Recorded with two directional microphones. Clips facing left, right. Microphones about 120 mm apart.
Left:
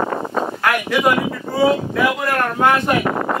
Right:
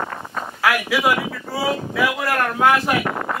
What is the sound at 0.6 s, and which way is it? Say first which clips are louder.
Speech: left 1 dB; 5° right (ahead or behind).